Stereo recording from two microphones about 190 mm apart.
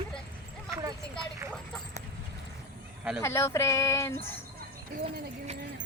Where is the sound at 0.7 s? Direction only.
20° right (ahead or behind).